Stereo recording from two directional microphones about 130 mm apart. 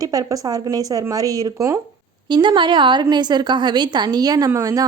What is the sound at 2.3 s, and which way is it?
A woman's voice, 35° right (ahead or behind).